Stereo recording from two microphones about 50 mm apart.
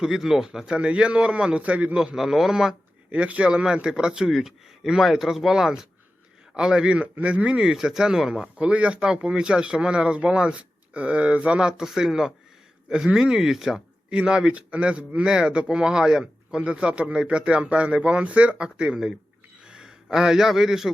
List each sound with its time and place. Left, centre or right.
0.0 s a man's voice: centre; by 2.0 s right
2.0 s a man's voice: centre
3.1 s a man's voice: right
4.3 s speech: centre
7.7 s a man's voice: centre
8.5 s speech: right
11.8 s a man's voice: centre
14.2 s a man's voice: right